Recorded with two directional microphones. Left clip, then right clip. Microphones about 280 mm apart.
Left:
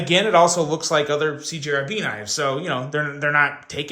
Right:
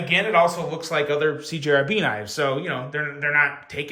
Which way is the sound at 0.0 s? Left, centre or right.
Centre.